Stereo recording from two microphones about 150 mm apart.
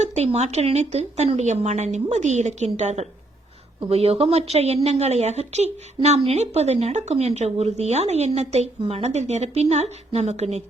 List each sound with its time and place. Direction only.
0.0 s speech: 45° right (ahead or behind)